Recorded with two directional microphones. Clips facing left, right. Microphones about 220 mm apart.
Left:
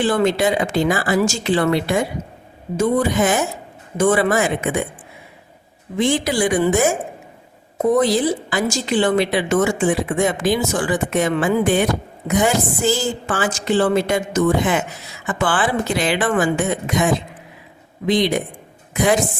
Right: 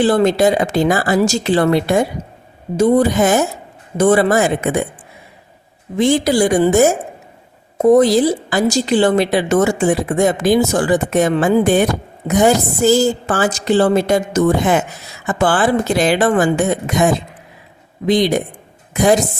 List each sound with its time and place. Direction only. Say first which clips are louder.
0.0 s a woman's voice: right 4 dB; 35° right (ahead or behind)
6.0 s a woman's voice: right 5 dB; 40° right (ahead or behind)
7.9 s a woman's voice: right 3 dB; 40° right (ahead or behind)